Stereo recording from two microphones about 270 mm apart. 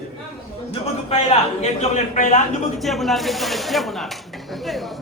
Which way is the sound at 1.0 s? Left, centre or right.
Left.